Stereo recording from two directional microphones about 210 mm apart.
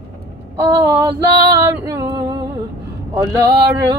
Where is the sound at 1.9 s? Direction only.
15° right (ahead or behind).